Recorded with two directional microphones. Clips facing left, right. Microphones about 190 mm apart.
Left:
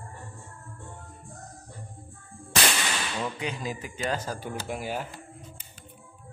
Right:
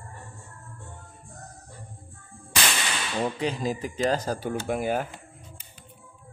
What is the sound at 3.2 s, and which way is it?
Speech, 35° right (ahead or behind).